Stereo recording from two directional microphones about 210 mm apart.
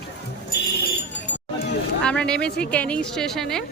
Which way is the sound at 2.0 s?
5° left (ahead or behind).